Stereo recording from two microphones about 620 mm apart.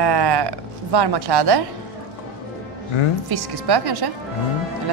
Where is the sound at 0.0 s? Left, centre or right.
Right.